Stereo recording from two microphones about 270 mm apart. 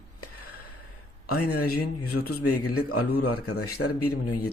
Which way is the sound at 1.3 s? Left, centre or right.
Left.